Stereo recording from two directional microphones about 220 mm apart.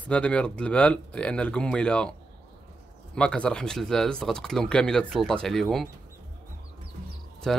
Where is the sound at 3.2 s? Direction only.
5° left (ahead or behind).